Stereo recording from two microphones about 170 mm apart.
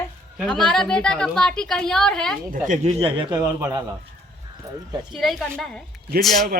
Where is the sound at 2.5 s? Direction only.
50° right (ahead or behind); by 3.8 s 20° right (ahead or behind).